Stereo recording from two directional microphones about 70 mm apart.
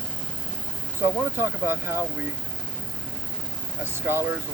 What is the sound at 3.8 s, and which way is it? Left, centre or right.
Speech, right.